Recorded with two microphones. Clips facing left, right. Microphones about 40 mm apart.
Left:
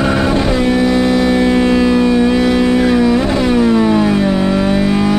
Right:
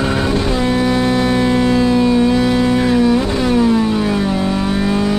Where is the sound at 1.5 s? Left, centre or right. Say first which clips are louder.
Left 2 dB; centre.